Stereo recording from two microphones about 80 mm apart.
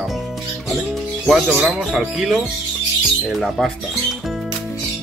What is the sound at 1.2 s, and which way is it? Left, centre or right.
Speech, centre.